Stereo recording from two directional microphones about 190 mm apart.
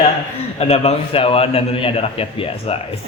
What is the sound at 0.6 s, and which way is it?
A man's voice, 30° left (ahead or behind).